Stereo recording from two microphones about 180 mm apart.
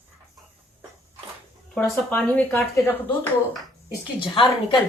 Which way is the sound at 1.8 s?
5° left (ahead or behind).